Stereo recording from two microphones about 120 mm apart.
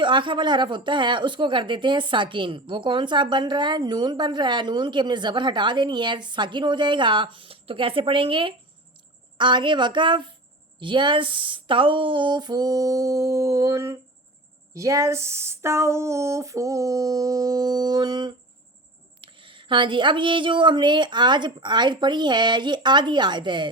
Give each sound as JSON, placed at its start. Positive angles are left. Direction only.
{"t": 0.0, "sound": "speech", "side_deg": -40}